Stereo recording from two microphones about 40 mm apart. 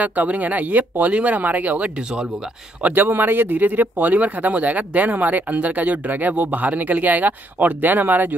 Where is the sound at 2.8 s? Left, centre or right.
Right.